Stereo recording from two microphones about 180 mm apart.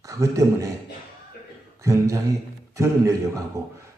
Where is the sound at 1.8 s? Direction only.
15° right (ahead or behind).